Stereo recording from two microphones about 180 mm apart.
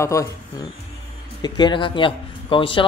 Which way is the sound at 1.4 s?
25° left (ahead or behind).